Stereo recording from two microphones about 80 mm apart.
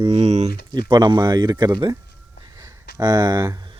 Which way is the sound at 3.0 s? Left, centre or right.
Right.